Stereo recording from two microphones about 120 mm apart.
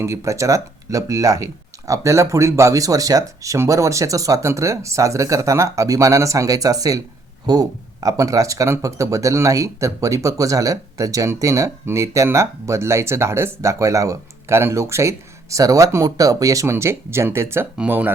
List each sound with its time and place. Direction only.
0.0 s speech: 25° right (ahead or behind)